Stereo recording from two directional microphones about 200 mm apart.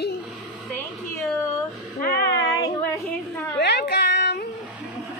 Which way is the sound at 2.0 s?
55° left (ahead or behind).